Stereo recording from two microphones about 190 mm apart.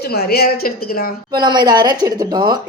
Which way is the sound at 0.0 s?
55° left (ahead or behind).